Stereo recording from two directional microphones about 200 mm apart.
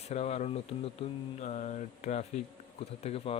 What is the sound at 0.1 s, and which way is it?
A man's voice, 35° left (ahead or behind).